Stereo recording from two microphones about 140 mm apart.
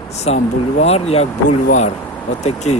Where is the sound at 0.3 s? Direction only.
50° left (ahead or behind).